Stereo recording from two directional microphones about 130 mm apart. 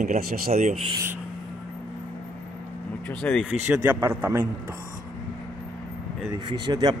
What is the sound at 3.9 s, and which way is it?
Speech, 15° right (ahead or behind).